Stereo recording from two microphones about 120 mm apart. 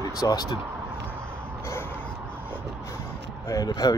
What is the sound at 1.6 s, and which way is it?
Music, 20° left (ahead or behind).